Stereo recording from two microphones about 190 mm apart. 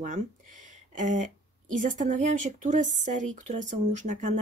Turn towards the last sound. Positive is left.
turn(degrees=-40)  # may be behind; listen again after turning